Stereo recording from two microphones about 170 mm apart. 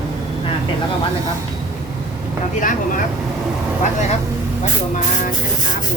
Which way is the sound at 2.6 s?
50° left (ahead or behind).